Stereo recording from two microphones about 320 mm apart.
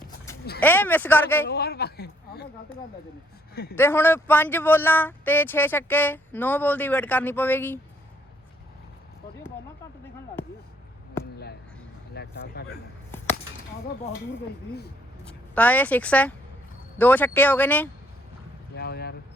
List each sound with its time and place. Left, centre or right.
0.6 s speech: centre
1.5 s a woman's voice: left
3.5 s speech: left
3.8 s speech: centre
12.1 s a sound: left
13.1 s a sound: centre
15.2 s a woman's voice: centre
18.7 s vehicle: left